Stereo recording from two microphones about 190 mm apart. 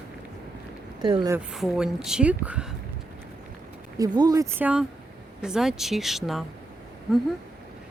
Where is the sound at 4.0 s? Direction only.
20° right (ahead or behind); by 6.4 s centre (ahead or behind).